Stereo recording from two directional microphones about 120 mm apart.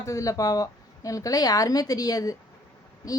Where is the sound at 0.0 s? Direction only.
25° left (ahead or behind).